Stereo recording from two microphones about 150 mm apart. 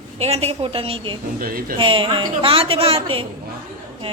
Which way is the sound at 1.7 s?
35° right (ahead or behind).